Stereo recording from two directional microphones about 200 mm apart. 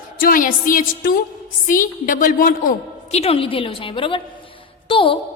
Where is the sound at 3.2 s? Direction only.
30° left (ahead or behind).